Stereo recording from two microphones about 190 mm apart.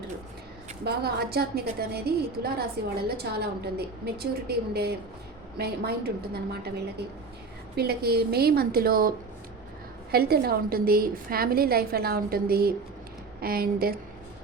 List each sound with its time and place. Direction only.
0.9 s a woman's voice: 55° right (ahead or behind)